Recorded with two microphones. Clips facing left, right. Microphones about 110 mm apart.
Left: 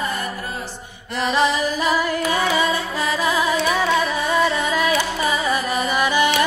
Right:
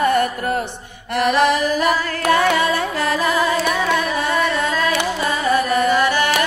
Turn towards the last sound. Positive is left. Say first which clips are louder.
# right 2 dB
turn(degrees=15)  # may be behind; listen again after turning